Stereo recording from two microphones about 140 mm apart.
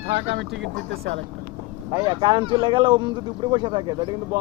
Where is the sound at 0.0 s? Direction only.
40° right (ahead or behind).